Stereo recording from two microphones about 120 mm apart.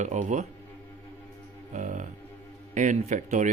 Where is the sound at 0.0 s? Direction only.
85° right.